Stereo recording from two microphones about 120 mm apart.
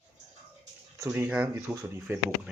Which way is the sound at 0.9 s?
25° right (ahead or behind).